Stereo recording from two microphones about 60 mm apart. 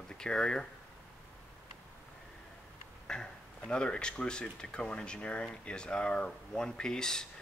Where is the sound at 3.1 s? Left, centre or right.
Centre.